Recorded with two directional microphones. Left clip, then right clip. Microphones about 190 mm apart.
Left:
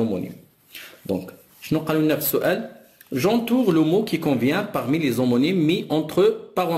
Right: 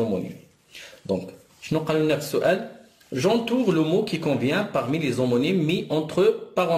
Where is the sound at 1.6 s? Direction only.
30° left (ahead or behind).